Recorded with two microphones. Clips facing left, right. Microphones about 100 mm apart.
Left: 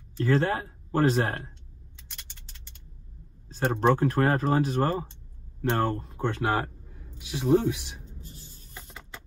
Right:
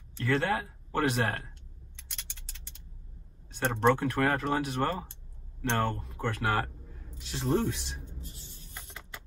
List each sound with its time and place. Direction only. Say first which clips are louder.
0.2 s speech: left 4 dB; 30° left (ahead or behind)
3.4 s speech: left 2 dB; 30° left (ahead or behind)
7.2 s speech: left 6 dB; 10° left (ahead or behind)
8.0 s a sound: even; 35° left (ahead or behind)